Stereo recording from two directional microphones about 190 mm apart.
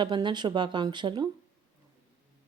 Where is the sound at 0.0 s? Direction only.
25° right (ahead or behind).